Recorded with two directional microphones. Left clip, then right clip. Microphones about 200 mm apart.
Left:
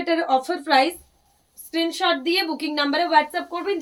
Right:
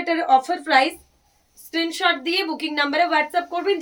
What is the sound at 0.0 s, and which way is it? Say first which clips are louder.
A woman's voice: right 3 dB; 15° right (ahead or behind).